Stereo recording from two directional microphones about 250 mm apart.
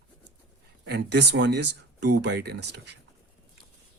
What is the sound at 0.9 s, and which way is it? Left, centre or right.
Speech, right.